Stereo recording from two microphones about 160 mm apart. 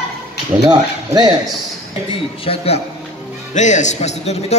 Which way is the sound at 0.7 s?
25° right (ahead or behind).